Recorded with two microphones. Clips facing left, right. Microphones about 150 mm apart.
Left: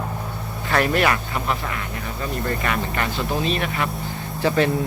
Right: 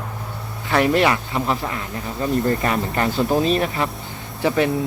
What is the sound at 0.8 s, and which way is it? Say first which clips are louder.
Speech: right 3 dB; 20° right (ahead or behind).